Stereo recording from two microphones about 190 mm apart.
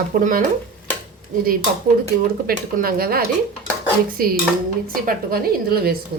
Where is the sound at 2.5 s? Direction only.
50° right (ahead or behind).